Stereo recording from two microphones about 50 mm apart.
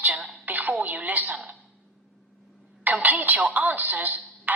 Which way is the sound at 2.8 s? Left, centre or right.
Right.